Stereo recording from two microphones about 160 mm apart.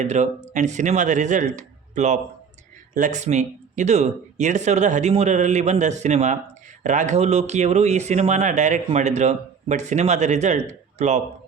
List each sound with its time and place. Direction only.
0.0 s speech: 45° right (ahead or behind)